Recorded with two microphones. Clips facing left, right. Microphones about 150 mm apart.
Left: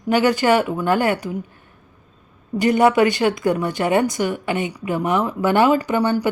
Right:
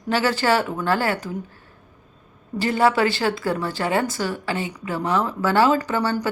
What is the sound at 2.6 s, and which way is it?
A woman's voice, 15° left (ahead or behind).